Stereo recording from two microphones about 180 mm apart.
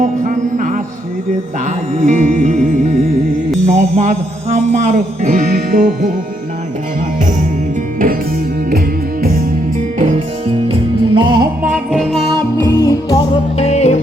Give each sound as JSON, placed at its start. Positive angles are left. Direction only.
{"t": 0.0, "sound": "music", "side_deg": -45}
{"t": 2.0, "sound": "music", "side_deg": -45}
{"t": 3.8, "sound": "speech", "side_deg": -35}
{"t": 10.0, "sound": "music", "side_deg": -35}
{"t": 11.6, "sound": "music", "side_deg": 0}
{"t": 12.3, "sound": "music", "side_deg": 15}
{"t": 13.6, "sound": "music", "side_deg": 35}